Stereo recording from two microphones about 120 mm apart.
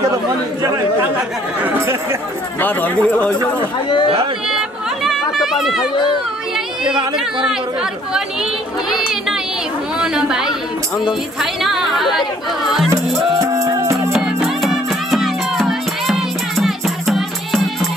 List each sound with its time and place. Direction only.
1.6 s speech: 15° right (ahead or behind)
2.6 s speech: 15° left (ahead or behind)
4.5 s chatter: 5° right (ahead or behind)
9.9 s speech: 5° right (ahead or behind)
11.6 s speech: centre (ahead or behind)
12.9 s music: 25° right (ahead or behind)
14.1 s music: centre (ahead or behind)